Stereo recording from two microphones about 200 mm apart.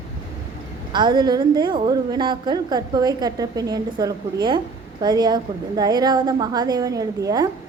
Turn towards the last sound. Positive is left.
turn(degrees=-20)  # may be behind; listen again after turning